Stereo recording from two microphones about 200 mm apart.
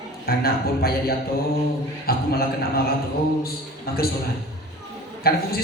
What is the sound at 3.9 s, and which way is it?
Speech, 50° left (ahead or behind).